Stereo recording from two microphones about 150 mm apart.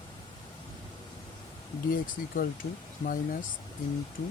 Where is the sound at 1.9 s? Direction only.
70° left (ahead or behind).